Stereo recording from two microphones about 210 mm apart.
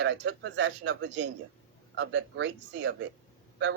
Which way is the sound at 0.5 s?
60° right (ahead or behind).